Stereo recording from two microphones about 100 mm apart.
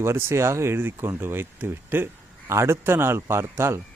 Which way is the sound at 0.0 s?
25° right (ahead or behind).